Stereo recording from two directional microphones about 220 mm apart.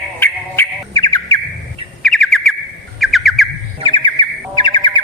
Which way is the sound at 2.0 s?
Centre (ahead or behind).